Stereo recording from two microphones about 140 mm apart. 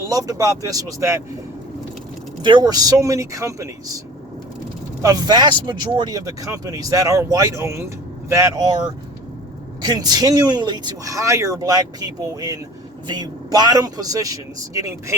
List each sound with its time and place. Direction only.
0.1 s speech: 25° right (ahead or behind)
2.4 s speech: 35° right (ahead or behind)
5.0 s speech: 30° right (ahead or behind)
9.8 s speech: 30° right (ahead or behind)